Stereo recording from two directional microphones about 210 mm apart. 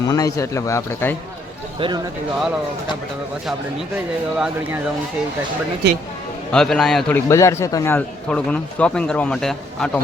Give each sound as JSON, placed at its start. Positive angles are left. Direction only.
{"t": 0.1, "sound": "speech", "side_deg": 15}
{"t": 3.9, "sound": "speech", "side_deg": -5}
{"t": 5.8, "sound": "speech", "side_deg": -55}
{"t": 6.5, "sound": "a man's voice", "side_deg": 0}
{"t": 7.3, "sound": "a man's voice", "side_deg": 15}